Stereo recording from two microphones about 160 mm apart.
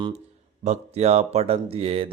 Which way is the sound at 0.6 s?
45° right (ahead or behind).